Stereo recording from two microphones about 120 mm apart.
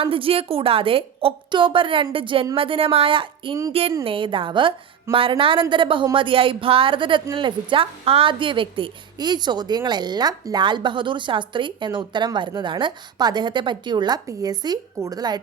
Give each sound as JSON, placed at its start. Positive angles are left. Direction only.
{"t": 0.0, "sound": "a woman's voice", "side_deg": -50}